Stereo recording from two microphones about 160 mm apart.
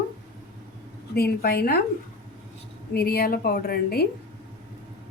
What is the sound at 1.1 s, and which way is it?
Speech, 70° left (ahead or behind).